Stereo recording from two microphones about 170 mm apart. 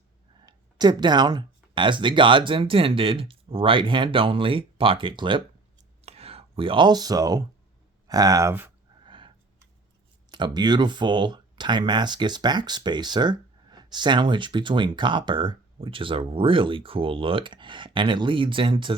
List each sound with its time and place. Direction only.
0.4 s speech: 25° right (ahead or behind)
9.0 s a sound: 30° right (ahead or behind)
10.3 s speech: 25° right (ahead or behind)